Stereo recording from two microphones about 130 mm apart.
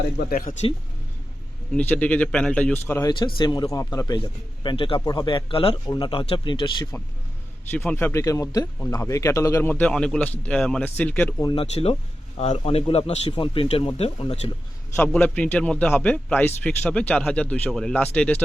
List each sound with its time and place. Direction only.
1.7 s speech: 10° left (ahead or behind)
3.1 s a man's voice: 35° left (ahead or behind)
7.7 s speech: 15° left (ahead or behind)
11.5 s speech: 50° left (ahead or behind)
13.3 s speech: 40° left (ahead or behind)
14.9 s speech: 15° left (ahead or behind)